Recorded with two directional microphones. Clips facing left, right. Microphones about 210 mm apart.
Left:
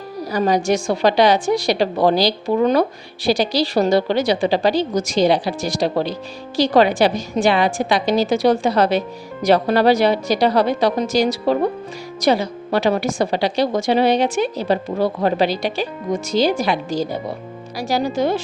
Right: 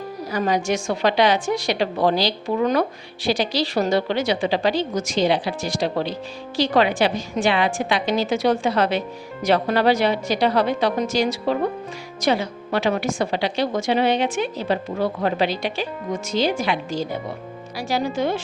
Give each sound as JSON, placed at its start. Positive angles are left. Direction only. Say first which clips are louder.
{"t": 0.3, "sound": "a woman's voice", "louder": "left 4 dB", "side_deg": 35}